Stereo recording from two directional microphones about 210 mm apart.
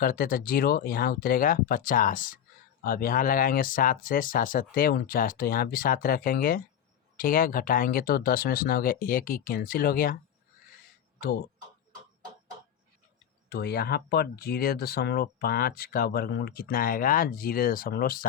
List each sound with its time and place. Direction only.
0.0 s speech: 45° left (ahead or behind)
13.5 s speech: 50° left (ahead or behind)